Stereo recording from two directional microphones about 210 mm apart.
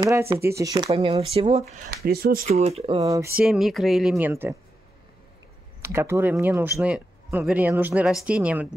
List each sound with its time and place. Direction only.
0.0 s speech: 15° right (ahead or behind)
0.8 s speech: 25° right (ahead or behind)
2.0 s speech: 45° right (ahead or behind)
2.5 s speech: 30° right (ahead or behind)
3.0 s speech: 15° right (ahead or behind)
3.3 s speech: 5° right (ahead or behind)
5.8 s speech: 10° right (ahead or behind)